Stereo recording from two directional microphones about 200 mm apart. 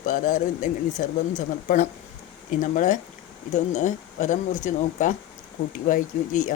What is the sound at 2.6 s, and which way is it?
Speech, 40° left (ahead or behind).